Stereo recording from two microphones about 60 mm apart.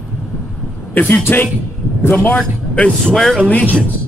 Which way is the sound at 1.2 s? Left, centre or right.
Left.